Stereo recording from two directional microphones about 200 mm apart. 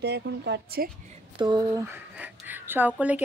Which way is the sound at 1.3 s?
20° right (ahead or behind).